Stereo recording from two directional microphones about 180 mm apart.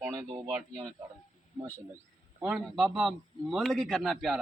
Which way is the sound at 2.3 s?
10° right (ahead or behind).